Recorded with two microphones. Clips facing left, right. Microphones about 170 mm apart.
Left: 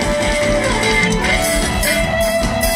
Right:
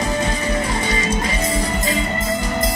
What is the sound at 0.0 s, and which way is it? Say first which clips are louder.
Music: left 5 dB; 80° left.